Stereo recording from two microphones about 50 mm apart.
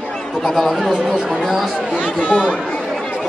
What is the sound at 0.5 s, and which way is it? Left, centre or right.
Speech, centre.